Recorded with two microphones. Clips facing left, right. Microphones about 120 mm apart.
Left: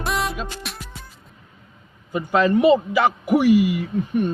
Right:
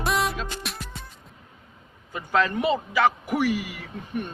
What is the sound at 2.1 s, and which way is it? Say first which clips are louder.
A man's voice: left 6 dB; 15° left (ahead or behind).